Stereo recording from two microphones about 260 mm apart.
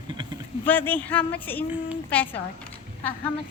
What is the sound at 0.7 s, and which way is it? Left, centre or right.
Speech, centre.